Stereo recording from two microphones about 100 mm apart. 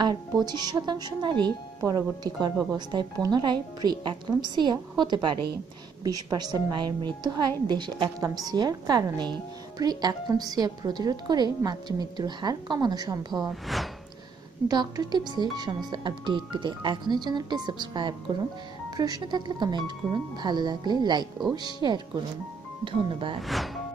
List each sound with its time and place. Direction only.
0.0 s speech: 45° right (ahead or behind)
1.8 s speech: 35° right (ahead or behind)
2.9 s speech: 45° right (ahead or behind)
13.5 s speech: centre (ahead or behind)
14.7 s speech: 40° right (ahead or behind)
22.8 s speech: 60° right (ahead or behind)
23.4 s speech: centre (ahead or behind)